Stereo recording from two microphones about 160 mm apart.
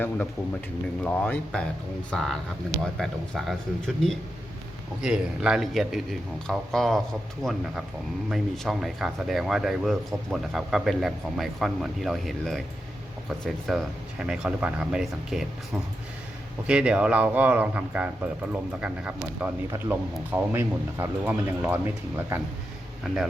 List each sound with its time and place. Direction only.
1.0 s speech: 10° left (ahead or behind)
8.3 s speech: centre (ahead or behind)
16.6 s speech: 5° right (ahead or behind)